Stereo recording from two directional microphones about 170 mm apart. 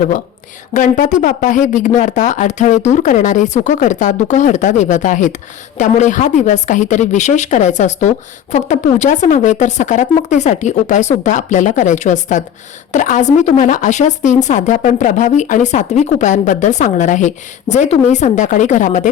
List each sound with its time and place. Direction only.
0.7 s speech: 45° left (ahead or behind)